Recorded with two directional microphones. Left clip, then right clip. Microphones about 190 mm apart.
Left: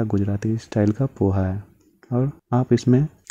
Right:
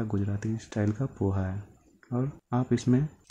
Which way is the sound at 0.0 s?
35° left (ahead or behind).